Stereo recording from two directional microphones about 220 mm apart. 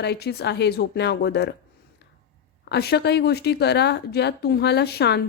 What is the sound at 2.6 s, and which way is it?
Speech, 50° left (ahead or behind).